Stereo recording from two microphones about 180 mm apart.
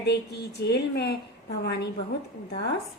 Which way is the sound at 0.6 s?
65° left (ahead or behind).